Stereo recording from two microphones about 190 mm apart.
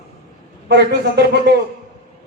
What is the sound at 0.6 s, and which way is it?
Speech, 60° right (ahead or behind).